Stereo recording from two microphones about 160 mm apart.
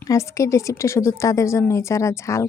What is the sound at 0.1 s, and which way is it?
A woman's voice, 20° left (ahead or behind).